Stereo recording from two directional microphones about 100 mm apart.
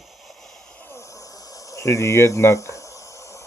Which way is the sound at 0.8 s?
25° left (ahead or behind).